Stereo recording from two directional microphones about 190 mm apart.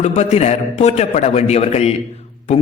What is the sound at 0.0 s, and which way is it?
A man's voice, 35° left (ahead or behind).